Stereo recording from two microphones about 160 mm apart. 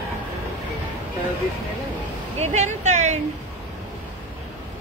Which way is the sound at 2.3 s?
45° right (ahead or behind).